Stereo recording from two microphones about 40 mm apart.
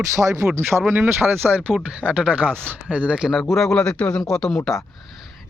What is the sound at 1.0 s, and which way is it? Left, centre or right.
Speech, right.